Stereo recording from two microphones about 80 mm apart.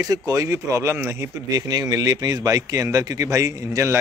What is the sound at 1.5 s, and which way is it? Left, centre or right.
A man's voice, right.